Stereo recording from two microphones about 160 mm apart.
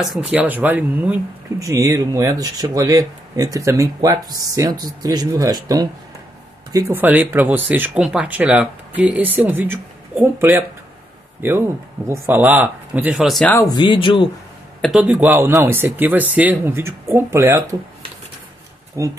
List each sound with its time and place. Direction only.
0.0 s speech: 5° right (ahead or behind)
13.5 s speech: 15° left (ahead or behind)
13.7 s speech: 30° left (ahead or behind)
14.8 s speech: 5° right (ahead or behind)
19.0 s speech: 20° right (ahead or behind)